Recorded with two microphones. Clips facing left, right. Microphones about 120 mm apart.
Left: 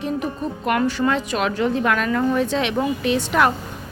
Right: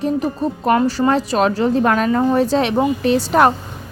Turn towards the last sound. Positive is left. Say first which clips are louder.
# right 5 dB
turn(degrees=-35)  # may be behind; listen again after turning